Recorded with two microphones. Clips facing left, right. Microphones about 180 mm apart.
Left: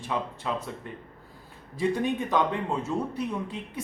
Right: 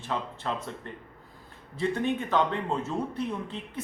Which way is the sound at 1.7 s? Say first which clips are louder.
Left 2 dB; 15° left (ahead or behind).